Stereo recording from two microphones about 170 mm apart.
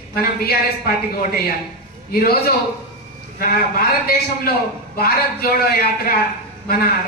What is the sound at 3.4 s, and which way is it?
A man's voice, 60° left (ahead or behind).